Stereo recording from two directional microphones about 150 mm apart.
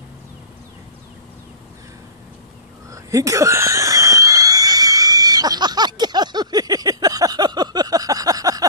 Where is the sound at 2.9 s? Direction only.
20° right (ahead or behind).